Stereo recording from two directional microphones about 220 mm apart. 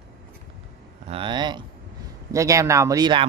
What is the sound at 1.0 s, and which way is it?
Speech, 25° right (ahead or behind).